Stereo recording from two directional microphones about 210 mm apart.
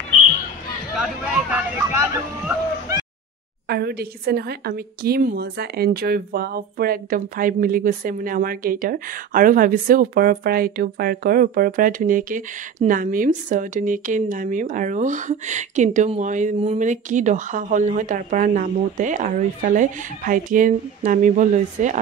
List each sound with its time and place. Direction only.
0.9 s hubbub: 5° right (ahead or behind)
3.6 s a woman's voice: 50° right (ahead or behind)